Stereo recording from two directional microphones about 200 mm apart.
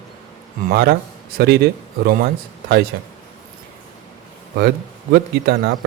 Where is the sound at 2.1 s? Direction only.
50° right (ahead or behind).